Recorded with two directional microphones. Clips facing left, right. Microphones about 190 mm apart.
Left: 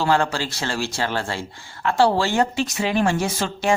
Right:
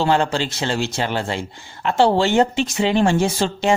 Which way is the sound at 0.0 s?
20° right (ahead or behind).